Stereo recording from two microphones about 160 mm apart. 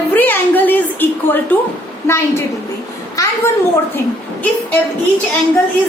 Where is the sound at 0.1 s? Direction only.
10° left (ahead or behind).